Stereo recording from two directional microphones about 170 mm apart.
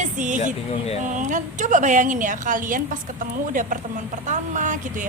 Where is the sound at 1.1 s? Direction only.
45° right (ahead or behind).